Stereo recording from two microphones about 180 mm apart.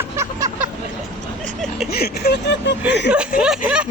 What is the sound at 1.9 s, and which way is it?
Vehicle, 60° left (ahead or behind).